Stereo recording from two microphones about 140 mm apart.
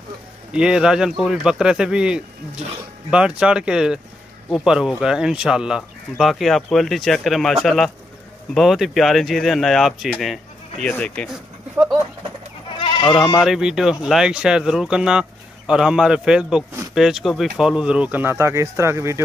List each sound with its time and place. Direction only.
0.5 s speech: 5° right (ahead or behind); by 11.2 s 10° left (ahead or behind)
12.7 s goat: 35° left (ahead or behind)
13.4 s speech: 5° right (ahead or behind); by 19.2 s 20° right (ahead or behind)